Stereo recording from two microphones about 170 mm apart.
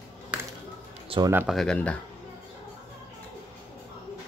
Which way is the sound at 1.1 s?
30° right (ahead or behind).